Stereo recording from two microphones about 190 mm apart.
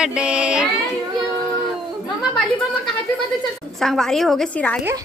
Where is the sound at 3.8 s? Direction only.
Centre (ahead or behind).